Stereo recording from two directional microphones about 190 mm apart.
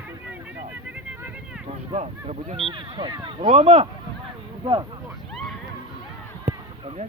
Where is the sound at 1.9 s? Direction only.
35° right (ahead or behind).